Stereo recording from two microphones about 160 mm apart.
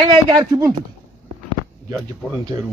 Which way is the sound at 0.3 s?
25° right (ahead or behind).